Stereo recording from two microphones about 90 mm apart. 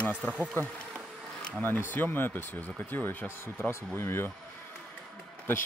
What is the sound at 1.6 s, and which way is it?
Speech, 20° left (ahead or behind).